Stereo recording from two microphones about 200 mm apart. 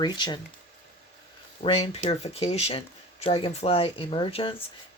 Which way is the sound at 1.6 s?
30° left (ahead or behind).